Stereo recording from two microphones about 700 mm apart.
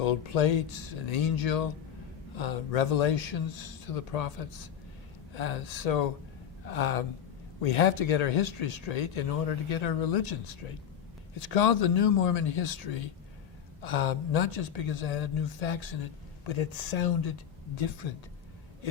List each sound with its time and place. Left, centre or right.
0.0 s speech: left
11.4 s speech: left